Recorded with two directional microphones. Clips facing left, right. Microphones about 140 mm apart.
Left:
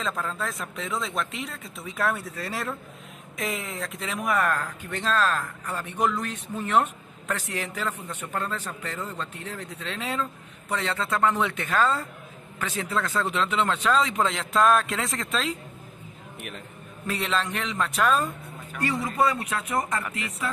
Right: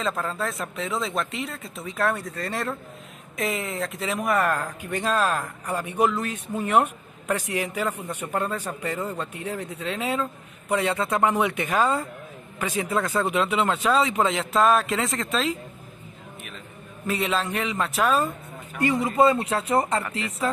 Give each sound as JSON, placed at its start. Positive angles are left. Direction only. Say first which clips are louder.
{"t": 0.0, "sound": "speech", "louder": "right 3 dB", "side_deg": 0}
{"t": 4.6, "sound": "a man's voice", "louder": "right 3 dB", "side_deg": -10}
{"t": 17.0, "sound": "speech", "louder": "right 2 dB", "side_deg": -5}
{"t": 18.8, "sound": "speech", "louder": "right 5 dB", "side_deg": -20}